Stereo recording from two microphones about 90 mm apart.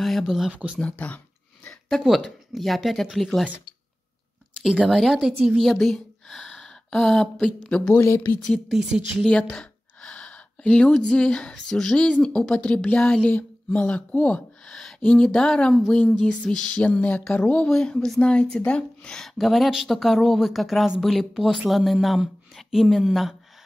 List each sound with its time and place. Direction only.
0.0 s speech: centre (ahead or behind)
0.7 s a sound: 15° left (ahead or behind)
1.9 s a woman's voice: centre (ahead or behind)
4.8 s a woman's voice: centre (ahead or behind)
8.0 s speech: 25° left (ahead or behind)
8.5 s a woman's voice: 5° left (ahead or behind)
9.2 s a sound: 10° left (ahead or behind)
11.0 s a woman's voice: 10° left (ahead or behind)